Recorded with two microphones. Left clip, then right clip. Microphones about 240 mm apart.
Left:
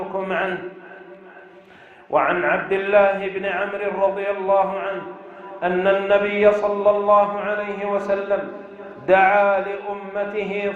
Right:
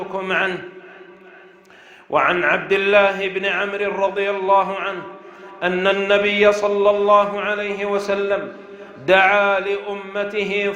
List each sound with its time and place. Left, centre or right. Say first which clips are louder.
0.1 s a man's voice: right 4 dB; right
2.1 s a man's voice: right 2 dB; right
5.5 s mantra: even; right